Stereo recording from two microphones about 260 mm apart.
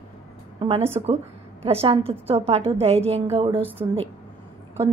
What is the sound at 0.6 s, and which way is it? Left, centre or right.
A woman's voice, right.